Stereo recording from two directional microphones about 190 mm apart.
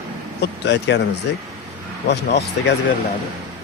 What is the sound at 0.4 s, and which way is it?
Speech, 60° left (ahead or behind).